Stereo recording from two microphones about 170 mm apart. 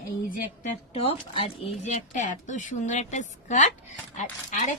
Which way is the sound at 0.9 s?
35° left (ahead or behind).